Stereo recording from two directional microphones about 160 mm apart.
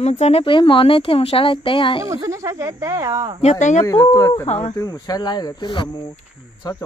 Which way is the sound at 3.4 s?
45° left (ahead or behind).